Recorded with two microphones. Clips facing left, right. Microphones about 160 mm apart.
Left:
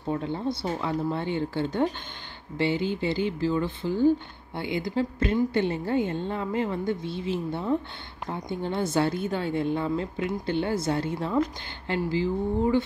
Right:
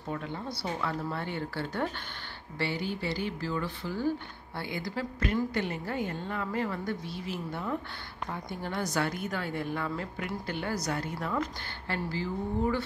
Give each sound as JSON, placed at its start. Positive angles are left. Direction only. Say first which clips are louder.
{"t": 0.1, "sound": "a woman's voice", "louder": "left 8 dB", "side_deg": 30}